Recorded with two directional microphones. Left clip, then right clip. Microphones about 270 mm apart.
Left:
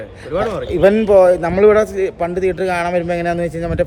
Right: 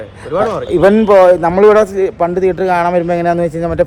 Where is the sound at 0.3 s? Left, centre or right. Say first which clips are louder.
Right 5 dB; centre.